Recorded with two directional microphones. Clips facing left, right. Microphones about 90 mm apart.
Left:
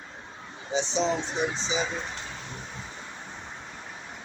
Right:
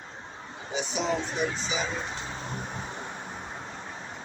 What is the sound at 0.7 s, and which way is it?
Speech, 30° left (ahead or behind).